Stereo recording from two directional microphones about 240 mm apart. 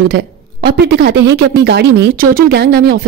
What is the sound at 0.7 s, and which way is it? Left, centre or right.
A woman's voice, right.